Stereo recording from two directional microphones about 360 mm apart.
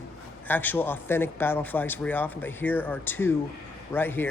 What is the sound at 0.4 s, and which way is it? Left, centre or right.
Speech, centre.